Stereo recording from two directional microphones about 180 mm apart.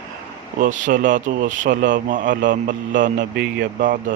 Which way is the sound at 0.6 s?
45° right (ahead or behind).